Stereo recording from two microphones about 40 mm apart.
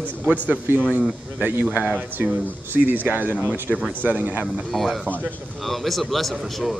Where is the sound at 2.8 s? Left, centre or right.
Right.